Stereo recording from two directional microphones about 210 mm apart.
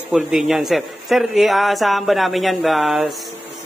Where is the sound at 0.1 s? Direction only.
Centre (ahead or behind).